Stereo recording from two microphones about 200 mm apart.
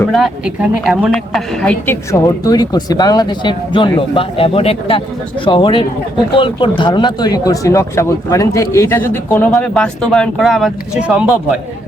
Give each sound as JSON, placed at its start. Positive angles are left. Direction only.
{"t": 0.0, "sound": "a woman's voice", "side_deg": 0}
{"t": 2.2, "sound": "speech", "side_deg": 20}